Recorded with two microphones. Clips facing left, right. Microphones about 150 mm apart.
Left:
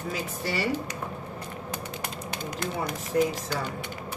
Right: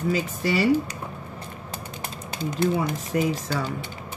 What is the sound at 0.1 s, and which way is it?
Speech, 90° right.